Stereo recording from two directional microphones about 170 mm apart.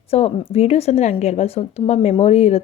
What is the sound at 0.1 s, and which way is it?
A woman's voice, 35° left (ahead or behind).